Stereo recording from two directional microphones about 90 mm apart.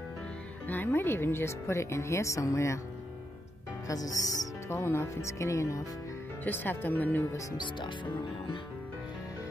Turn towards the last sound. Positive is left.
turn(degrees=55)  # may be behind; listen again after turning